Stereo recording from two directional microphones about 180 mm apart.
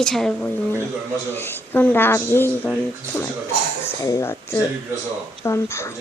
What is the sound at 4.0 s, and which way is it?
A woman's voice, 15° left (ahead or behind).